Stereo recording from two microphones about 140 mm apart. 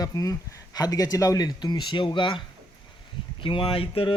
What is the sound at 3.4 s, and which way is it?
Speech, 40° left (ahead or behind).